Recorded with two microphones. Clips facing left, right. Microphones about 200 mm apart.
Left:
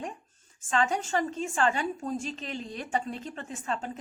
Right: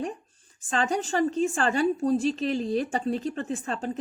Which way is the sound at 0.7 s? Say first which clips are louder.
Right 1 dB; 35° right (ahead or behind).